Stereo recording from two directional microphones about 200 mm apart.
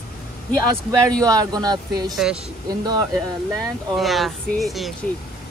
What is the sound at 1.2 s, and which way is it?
Speech, 20° right (ahead or behind).